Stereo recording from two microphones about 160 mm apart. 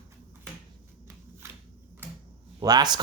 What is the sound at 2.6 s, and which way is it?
Speech, 25° right (ahead or behind).